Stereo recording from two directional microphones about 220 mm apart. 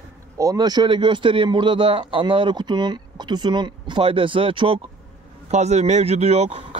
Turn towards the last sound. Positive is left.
turn(degrees=-30)  # may be behind; listen again after turning